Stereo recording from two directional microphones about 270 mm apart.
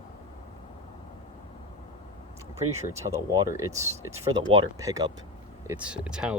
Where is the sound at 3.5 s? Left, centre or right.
Centre.